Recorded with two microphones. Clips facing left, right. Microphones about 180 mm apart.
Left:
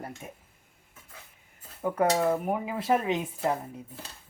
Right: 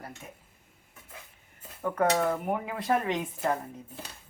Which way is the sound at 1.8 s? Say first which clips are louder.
Left 1 dB; 10° left (ahead or behind).